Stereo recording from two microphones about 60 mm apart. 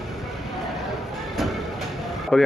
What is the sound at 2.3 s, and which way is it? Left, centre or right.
Speech, centre.